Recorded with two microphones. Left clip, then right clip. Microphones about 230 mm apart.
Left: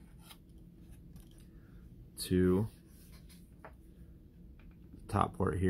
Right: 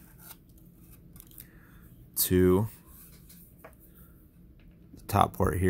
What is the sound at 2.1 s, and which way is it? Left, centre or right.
Speech, right.